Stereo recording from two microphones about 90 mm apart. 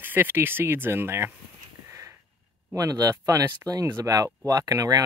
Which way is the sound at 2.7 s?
40° right (ahead or behind).